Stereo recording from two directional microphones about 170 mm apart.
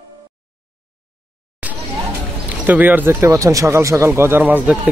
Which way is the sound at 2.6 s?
10° right (ahead or behind).